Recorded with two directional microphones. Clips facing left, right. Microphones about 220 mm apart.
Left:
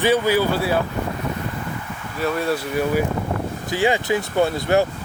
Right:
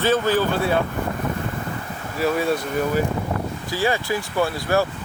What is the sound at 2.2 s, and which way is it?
Speech, centre (ahead or behind).